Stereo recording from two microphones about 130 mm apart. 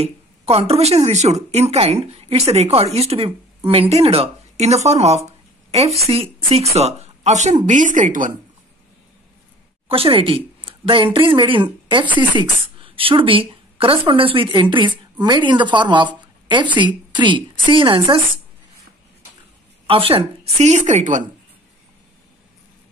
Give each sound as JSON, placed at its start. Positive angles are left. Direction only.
{"t": 0.0, "sound": "speech", "side_deg": -50}
{"t": 7.6, "sound": "speech", "side_deg": -75}
{"t": 9.8, "sound": "a woman's voice", "side_deg": -45}
{"t": 19.9, "sound": "a woman's voice", "side_deg": -45}